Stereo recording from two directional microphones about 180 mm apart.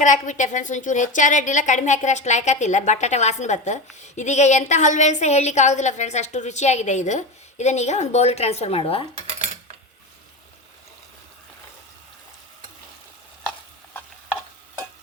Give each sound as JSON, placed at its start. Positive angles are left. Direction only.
{"t": 0.0, "sound": "a woman's voice", "side_deg": 45}